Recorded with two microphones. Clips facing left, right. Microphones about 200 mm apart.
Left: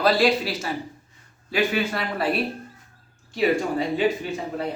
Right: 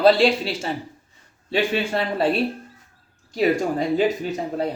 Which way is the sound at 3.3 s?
40° right (ahead or behind).